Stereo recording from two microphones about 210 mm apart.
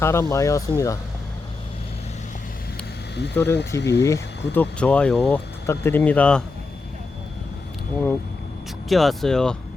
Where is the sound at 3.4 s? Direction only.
55° left (ahead or behind).